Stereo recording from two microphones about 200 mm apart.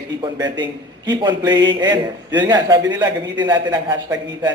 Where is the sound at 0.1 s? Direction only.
20° right (ahead or behind).